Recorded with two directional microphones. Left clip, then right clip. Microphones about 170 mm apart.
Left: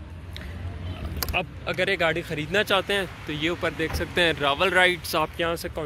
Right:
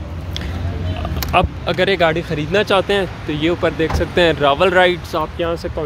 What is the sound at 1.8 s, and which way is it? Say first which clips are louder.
Speech: right 8 dB; 15° right (ahead or behind).